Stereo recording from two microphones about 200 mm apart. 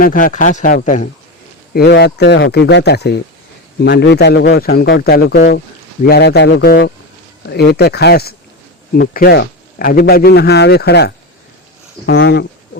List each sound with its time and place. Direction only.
0.0 s speech: 45° left (ahead or behind)
1.7 s a man's voice: 55° left (ahead or behind)